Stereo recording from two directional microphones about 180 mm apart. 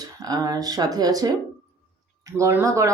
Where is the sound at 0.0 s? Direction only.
20° right (ahead or behind).